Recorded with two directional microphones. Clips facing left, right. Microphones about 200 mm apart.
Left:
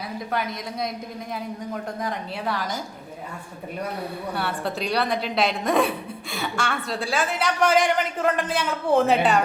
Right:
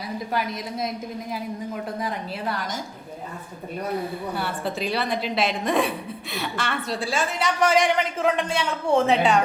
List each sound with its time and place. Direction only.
0.3 s a woman's voice: centre (ahead or behind)
2.0 s a woman's voice: centre (ahead or behind)
4.4 s a woman's voice: centre (ahead or behind)